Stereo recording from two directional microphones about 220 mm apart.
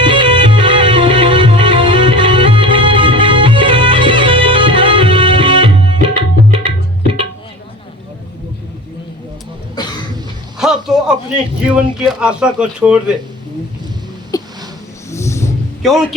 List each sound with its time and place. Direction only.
0.0 s music: 20° right (ahead or behind)
6.7 s tabla: 20° right (ahead or behind)
9.7 s cough: 20° left (ahead or behind)
10.6 s a sound: centre (ahead or behind)
11.6 s a man's voice: 5° right (ahead or behind)
14.3 s a sound: 15° left (ahead or behind)
15.1 s wild animals: 15° left (ahead or behind)
15.8 s a man's voice: centre (ahead or behind)